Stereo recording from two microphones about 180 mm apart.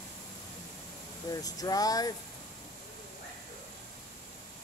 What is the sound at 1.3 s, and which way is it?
Speech, 20° left (ahead or behind).